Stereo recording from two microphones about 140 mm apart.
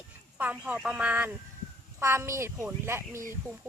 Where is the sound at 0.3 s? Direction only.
10° right (ahead or behind).